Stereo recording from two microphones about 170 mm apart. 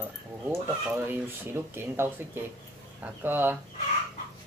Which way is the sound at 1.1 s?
15° right (ahead or behind).